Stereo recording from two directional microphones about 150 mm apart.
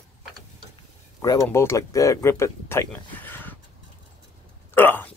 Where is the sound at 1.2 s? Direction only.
20° left (ahead or behind).